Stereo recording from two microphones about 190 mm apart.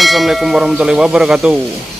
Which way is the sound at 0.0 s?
Centre (ahead or behind).